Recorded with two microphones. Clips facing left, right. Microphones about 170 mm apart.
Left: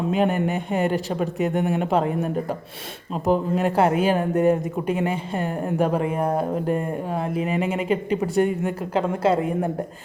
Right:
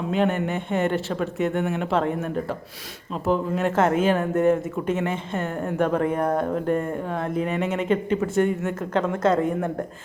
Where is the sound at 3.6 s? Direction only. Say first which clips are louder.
Left 1 dB; 10° left (ahead or behind).